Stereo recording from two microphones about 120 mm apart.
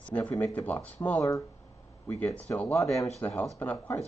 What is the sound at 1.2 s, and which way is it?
Speech, 25° left (ahead or behind).